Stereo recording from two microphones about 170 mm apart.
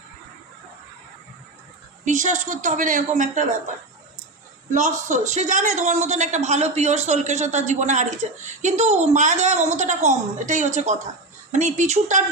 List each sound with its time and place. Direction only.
2.0 s a man's voice: 45° right (ahead or behind)
5.0 s a man's voice: 45° right (ahead or behind)